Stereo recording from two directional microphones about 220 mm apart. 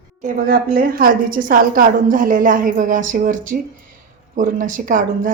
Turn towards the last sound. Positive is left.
turn(degrees=-35)  # may be behind; listen again after turning